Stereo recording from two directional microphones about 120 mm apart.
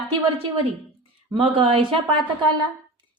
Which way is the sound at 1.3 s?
50° right (ahead or behind).